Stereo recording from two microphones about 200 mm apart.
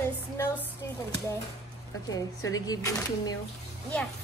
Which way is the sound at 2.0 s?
15° left (ahead or behind).